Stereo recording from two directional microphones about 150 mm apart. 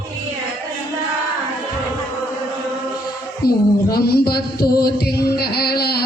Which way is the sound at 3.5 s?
90° left.